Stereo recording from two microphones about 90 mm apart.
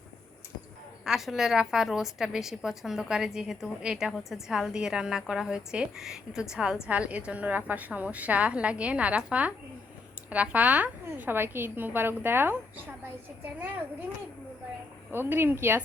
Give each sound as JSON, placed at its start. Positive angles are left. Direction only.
{"t": 1.0, "sound": "a woman's voice", "side_deg": -5}
{"t": 15.1, "sound": "a woman's voice", "side_deg": -25}